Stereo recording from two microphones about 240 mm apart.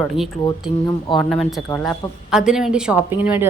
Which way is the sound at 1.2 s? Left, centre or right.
Centre.